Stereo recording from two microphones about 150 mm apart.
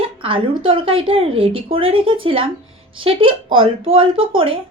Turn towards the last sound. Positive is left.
turn(degrees=-35)  # may be behind; listen again after turning